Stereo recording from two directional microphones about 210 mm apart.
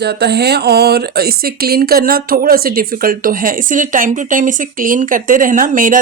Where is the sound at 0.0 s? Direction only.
50° right (ahead or behind).